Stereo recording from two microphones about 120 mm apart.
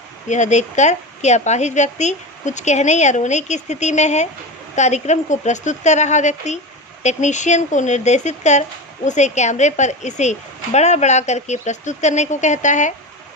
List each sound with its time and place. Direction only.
0.3 s a woman's voice: 85° left